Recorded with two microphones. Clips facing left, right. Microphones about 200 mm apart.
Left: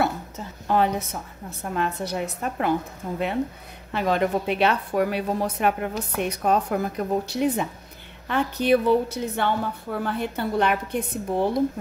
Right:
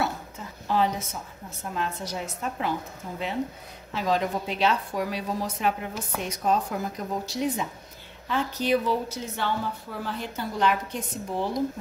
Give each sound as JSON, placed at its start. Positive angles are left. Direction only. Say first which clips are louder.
{"t": 0.7, "sound": "a woman's voice", "louder": "left 3 dB", "side_deg": 55}